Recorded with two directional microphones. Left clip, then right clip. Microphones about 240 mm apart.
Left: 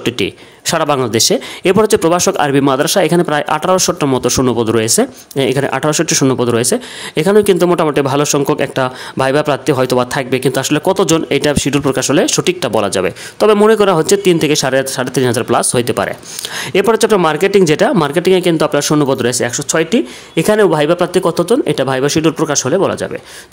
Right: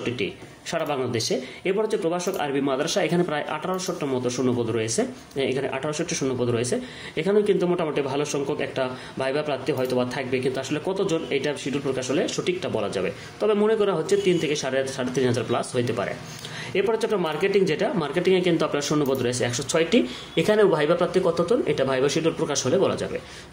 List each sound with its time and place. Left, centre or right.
0.0 s speech: left